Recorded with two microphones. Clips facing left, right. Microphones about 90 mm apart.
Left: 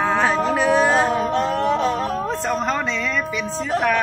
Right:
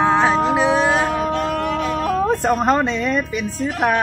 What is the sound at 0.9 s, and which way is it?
Music, 30° left (ahead or behind).